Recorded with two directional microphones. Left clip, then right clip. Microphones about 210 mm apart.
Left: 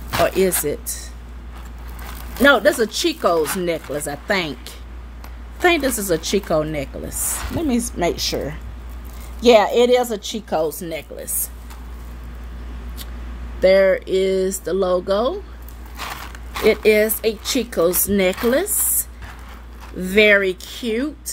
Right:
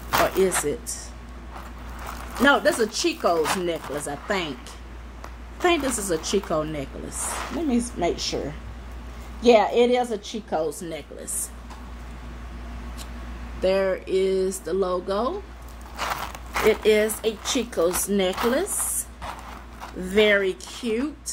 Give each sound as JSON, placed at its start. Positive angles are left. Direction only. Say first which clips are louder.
{"t": 0.1, "sound": "music", "louder": "left 3 dB", "side_deg": 0}
{"t": 0.7, "sound": "speech", "louder": "left 3 dB", "side_deg": 45}
{"t": 2.4, "sound": "speech", "louder": "left 5 dB", "side_deg": 40}
{"t": 13.6, "sound": "speech", "louder": "left 9 dB", "side_deg": 40}
{"t": 16.0, "sound": "a sound", "louder": "right 2 dB", "side_deg": 0}
{"t": 16.8, "sound": "speech", "louder": "left 5 dB", "side_deg": 40}
{"t": 20.0, "sound": "speech", "louder": "left 6 dB", "side_deg": 40}